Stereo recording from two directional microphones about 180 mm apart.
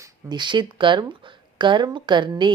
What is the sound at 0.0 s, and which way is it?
Speech, 25° right (ahead or behind).